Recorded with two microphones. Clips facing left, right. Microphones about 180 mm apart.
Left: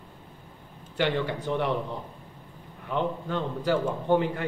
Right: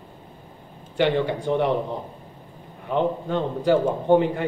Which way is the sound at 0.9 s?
20° right (ahead or behind).